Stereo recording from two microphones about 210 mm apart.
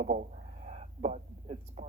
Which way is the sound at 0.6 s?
35° right (ahead or behind).